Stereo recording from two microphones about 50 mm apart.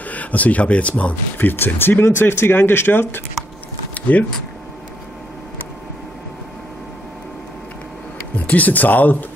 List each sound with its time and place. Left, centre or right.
0.1 s speech: left
1.4 s speech: left
3.9 s a sound: left
8.5 s speech: left